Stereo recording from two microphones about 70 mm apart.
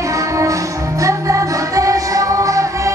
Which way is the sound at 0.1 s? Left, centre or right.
Right.